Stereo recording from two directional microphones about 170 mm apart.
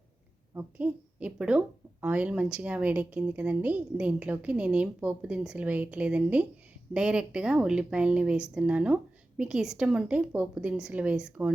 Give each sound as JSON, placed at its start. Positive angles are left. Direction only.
{"t": 0.5, "sound": "a woman's voice", "side_deg": -10}